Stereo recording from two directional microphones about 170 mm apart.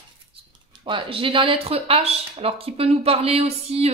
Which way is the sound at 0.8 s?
30° right (ahead or behind).